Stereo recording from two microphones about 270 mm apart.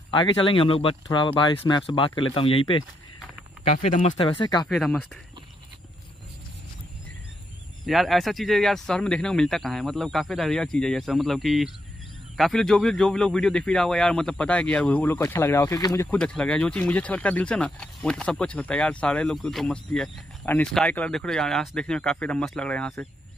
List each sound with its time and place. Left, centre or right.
0.1 s speech: centre
4.6 s speech: centre
7.8 s speech: centre